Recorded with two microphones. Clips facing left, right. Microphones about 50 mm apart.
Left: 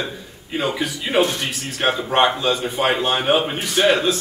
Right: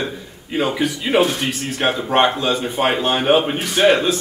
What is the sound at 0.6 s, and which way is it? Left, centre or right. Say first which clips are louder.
A man's voice: right 3 dB; centre.